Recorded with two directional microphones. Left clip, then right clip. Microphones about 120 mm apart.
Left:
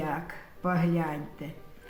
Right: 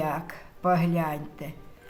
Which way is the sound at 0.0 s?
50° right (ahead or behind).